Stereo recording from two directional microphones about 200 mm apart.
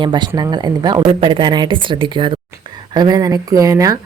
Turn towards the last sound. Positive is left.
turn(degrees=-15)  # may be behind; listen again after turning